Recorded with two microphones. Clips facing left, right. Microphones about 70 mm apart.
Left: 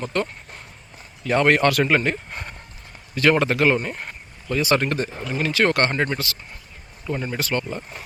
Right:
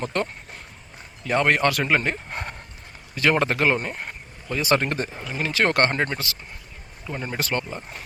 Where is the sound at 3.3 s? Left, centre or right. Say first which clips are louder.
Left 2 dB; right.